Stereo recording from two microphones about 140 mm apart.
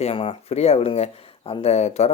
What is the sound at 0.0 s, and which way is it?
Speech, 40° left (ahead or behind).